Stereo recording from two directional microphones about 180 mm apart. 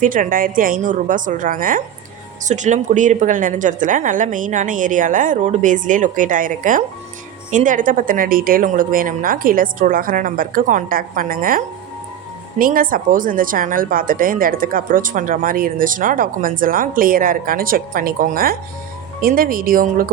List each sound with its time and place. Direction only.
0.0 s speech: 50° right (ahead or behind)